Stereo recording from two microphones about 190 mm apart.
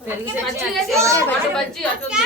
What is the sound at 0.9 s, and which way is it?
Speech, 15° right (ahead or behind).